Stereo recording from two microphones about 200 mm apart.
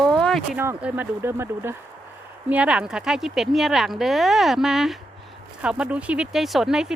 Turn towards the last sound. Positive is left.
turn(degrees=-5)  # may be behind; listen again after turning